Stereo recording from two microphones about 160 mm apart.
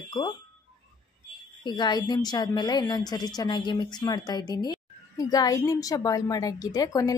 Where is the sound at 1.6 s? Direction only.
25° left (ahead or behind).